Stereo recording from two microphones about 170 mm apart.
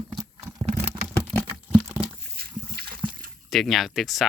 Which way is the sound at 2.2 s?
65° right (ahead or behind).